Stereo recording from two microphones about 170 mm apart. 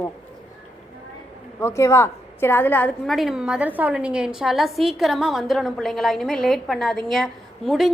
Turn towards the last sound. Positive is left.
turn(degrees=0)  # may be behind; listen again after turning